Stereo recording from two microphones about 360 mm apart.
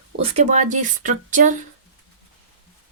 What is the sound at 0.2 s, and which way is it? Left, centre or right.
Speech, centre.